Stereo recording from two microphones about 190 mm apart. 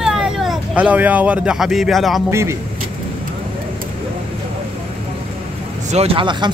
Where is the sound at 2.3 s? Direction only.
15° right (ahead or behind).